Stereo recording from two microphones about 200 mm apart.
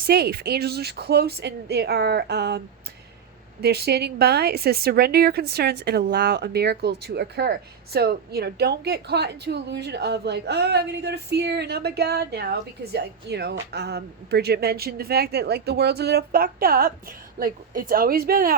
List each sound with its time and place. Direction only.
0.0 s a woman's voice: 50° right (ahead or behind)
3.6 s a woman's voice: 55° right (ahead or behind)